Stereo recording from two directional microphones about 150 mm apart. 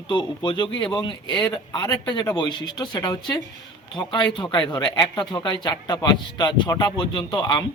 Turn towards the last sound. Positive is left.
turn(degrees=30)  # may be behind; listen again after turning